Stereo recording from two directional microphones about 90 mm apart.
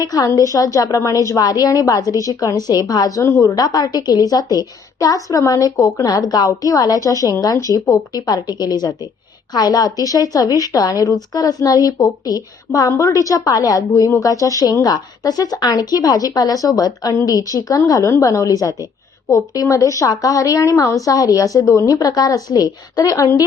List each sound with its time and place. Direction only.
0.0 s a woman's voice: 45° left (ahead or behind)